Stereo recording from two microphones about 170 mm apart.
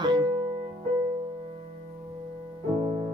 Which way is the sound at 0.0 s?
25° right (ahead or behind).